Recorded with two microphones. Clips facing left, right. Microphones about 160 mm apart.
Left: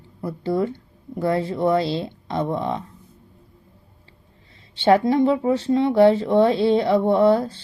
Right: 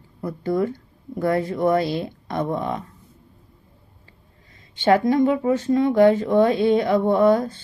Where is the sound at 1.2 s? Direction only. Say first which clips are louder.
Even; 25° left (ahead or behind).